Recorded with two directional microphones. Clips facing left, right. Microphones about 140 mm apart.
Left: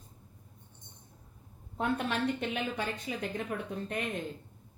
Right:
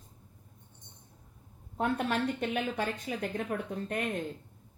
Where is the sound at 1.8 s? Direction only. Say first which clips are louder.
Right 1 dB; 45° right (ahead or behind).